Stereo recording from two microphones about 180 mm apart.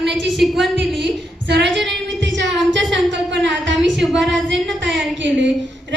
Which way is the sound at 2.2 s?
90° right.